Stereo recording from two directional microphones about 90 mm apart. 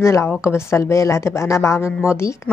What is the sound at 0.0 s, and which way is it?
A woman's voice, 30° left (ahead or behind).